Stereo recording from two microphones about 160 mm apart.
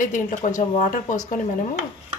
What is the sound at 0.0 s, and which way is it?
A woman's voice, 55° left (ahead or behind).